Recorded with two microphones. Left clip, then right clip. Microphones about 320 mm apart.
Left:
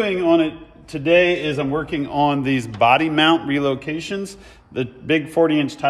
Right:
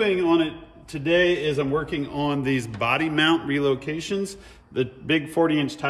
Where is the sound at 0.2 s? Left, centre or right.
Centre.